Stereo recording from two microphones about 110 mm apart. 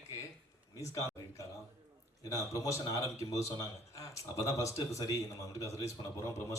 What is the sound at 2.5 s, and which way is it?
Speech, 30° left (ahead or behind).